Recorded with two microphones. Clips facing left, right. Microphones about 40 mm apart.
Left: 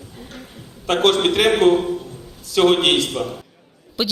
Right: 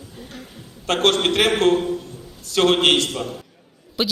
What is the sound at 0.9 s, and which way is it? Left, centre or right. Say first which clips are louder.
A man's voice: left 2 dB; centre.